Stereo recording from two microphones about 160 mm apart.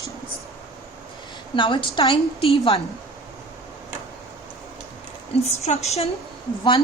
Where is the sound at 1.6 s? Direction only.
30° left (ahead or behind).